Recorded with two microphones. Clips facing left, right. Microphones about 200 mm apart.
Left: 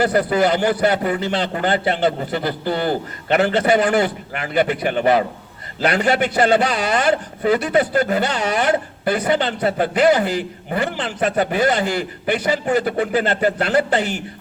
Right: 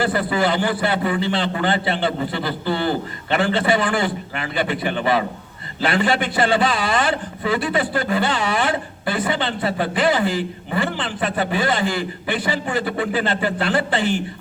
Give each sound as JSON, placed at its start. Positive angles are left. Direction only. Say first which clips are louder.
{"t": 0.0, "sound": "a man's voice", "louder": "left 3 dB", "side_deg": 40}